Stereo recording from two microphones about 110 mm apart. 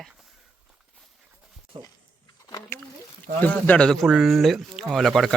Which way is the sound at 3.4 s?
15° left (ahead or behind).